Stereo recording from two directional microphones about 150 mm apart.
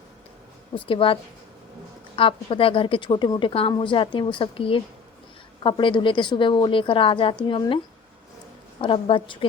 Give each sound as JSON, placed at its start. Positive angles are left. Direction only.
{"t": 0.8, "sound": "a woman's voice", "side_deg": 35}
{"t": 8.8, "sound": "a woman's voice", "side_deg": 35}